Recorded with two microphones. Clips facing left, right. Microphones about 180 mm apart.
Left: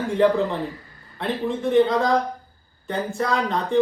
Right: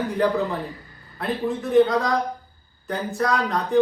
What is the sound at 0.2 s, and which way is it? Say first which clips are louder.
Speech: left 4 dB; centre (ahead or behind).